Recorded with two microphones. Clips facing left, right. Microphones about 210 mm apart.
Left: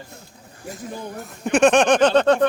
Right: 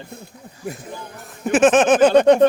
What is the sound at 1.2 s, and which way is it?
Speech, centre (ahead or behind).